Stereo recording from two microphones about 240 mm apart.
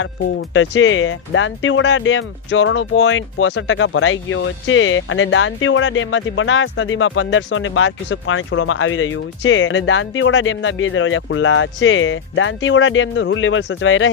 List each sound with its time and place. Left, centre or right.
0.5 s speech: left